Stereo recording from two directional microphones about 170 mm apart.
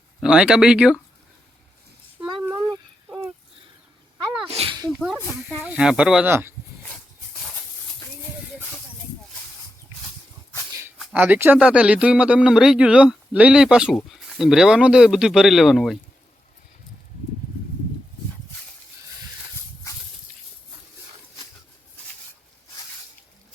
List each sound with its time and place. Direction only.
0.2 s speech: 5° right (ahead or behind)
4.4 s sneeze: 35° right (ahead or behind)
4.9 s snake: centre (ahead or behind)
5.5 s speech: 5° right (ahead or behind)
10.8 s a sound: 15° right (ahead or behind)
11.1 s speech: 10° right (ahead or behind)